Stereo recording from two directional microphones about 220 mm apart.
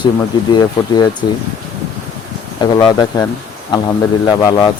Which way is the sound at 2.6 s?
20° left (ahead or behind).